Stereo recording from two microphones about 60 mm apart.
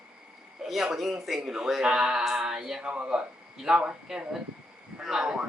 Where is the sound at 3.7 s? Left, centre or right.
Centre.